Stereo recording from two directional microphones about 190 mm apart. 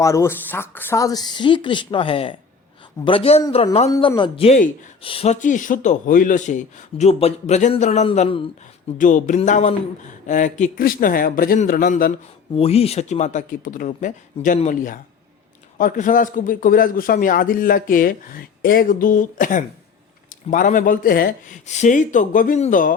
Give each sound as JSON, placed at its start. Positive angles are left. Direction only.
{"t": 0.0, "sound": "speech", "side_deg": 15}
{"t": 3.8, "sound": "speech", "side_deg": 15}
{"t": 9.0, "sound": "a man's voice", "side_deg": 40}
{"t": 12.5, "sound": "a man's voice", "side_deg": 30}